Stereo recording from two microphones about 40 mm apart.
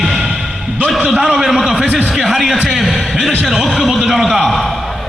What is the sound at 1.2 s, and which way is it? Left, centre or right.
A man's voice, centre.